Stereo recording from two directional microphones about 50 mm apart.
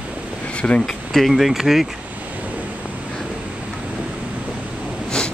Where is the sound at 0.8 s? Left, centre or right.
Centre.